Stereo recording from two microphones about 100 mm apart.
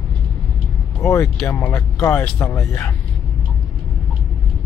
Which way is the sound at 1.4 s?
30° left (ahead or behind).